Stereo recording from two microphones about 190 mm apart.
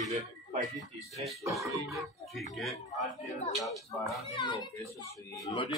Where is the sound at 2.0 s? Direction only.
Centre (ahead or behind).